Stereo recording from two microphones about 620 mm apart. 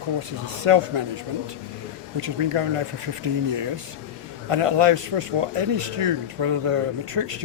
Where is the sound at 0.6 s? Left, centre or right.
Right.